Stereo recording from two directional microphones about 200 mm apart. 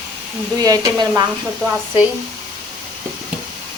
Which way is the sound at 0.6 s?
20° right (ahead or behind).